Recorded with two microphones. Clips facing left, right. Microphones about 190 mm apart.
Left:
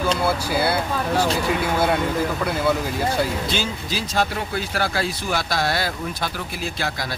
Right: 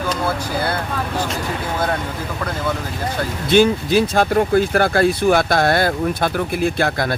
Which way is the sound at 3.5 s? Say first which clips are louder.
Right 13 dB; 55° right (ahead or behind).